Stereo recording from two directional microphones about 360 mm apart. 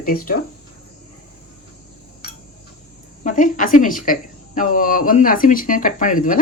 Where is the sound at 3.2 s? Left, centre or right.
Left.